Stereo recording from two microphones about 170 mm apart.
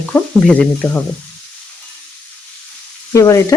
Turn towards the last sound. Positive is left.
turn(degrees=20)  # may be behind; listen again after turning